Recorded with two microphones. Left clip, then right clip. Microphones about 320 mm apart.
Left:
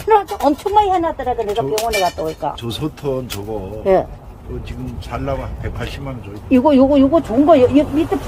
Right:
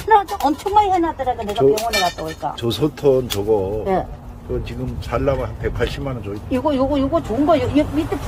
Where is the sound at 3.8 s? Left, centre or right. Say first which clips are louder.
Left 6 dB; left.